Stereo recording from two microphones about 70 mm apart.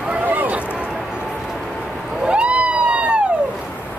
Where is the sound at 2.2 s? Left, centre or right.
Centre.